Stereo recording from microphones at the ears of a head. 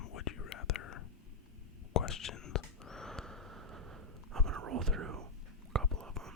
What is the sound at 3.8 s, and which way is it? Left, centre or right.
Whispering, right.